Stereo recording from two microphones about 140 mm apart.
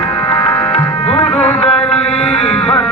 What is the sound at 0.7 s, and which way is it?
Music, 45° left (ahead or behind).